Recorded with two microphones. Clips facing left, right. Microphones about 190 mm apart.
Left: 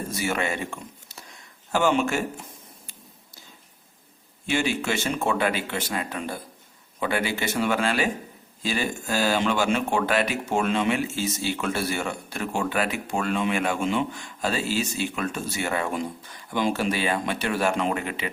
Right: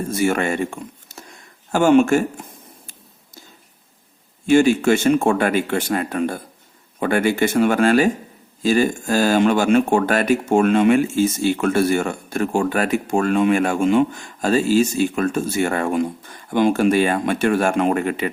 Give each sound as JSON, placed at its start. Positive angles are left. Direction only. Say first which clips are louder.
{"t": 0.1, "sound": "speech", "louder": "right 9 dB", "side_deg": -50}
{"t": 4.4, "sound": "speech", "louder": "right 11 dB", "side_deg": -45}